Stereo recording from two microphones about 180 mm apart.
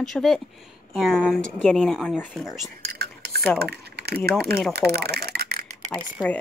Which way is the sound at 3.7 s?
65° right (ahead or behind).